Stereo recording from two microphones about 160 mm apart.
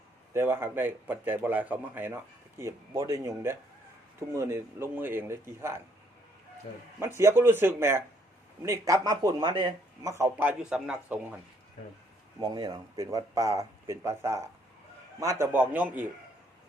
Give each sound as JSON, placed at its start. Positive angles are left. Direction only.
{"t": 0.3, "sound": "a man's voice", "side_deg": -15}
{"t": 7.0, "sound": "a man's voice", "side_deg": -15}
{"t": 12.4, "sound": "a man's voice", "side_deg": -25}